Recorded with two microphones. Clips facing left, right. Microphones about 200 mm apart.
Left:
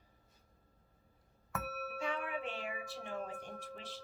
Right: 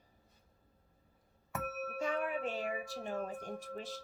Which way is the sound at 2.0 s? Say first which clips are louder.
Right 4 dB; 40° right (ahead or behind).